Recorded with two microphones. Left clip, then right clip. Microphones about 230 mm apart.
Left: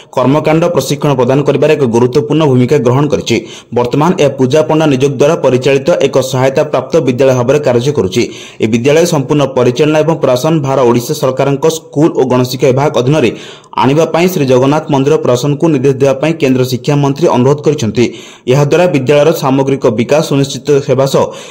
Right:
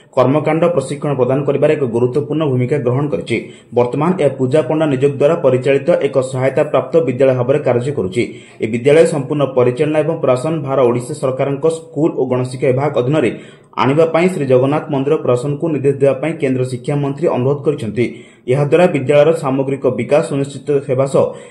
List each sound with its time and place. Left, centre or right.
0.1 s a man's voice: left